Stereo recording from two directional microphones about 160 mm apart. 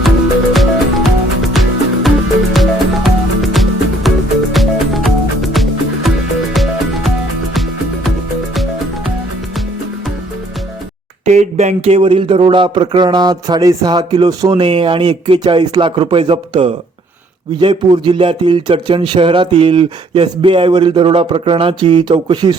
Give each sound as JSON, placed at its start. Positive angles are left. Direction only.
{"t": 0.5, "sound": "music", "side_deg": 0}
{"t": 11.3, "sound": "speech", "side_deg": -45}